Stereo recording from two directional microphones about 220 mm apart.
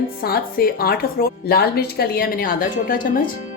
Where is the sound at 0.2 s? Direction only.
45° left (ahead or behind).